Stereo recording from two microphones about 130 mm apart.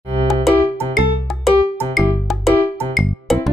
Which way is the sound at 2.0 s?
Centre (ahead or behind).